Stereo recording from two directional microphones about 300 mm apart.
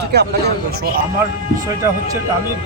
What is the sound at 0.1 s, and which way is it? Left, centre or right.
Speech, right.